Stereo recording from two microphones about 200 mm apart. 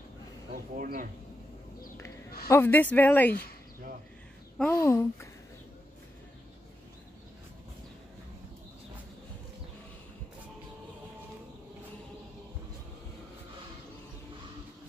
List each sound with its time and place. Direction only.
0.7 s speech: 45° right (ahead or behind)
2.4 s speech: 10° left (ahead or behind)
4.6 s speech: 15° left (ahead or behind)